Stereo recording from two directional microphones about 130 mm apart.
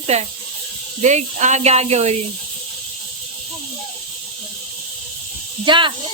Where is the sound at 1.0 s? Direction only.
65° right (ahead or behind).